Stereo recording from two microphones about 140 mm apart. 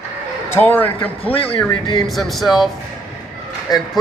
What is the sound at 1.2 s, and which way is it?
Speech, 40° left (ahead or behind).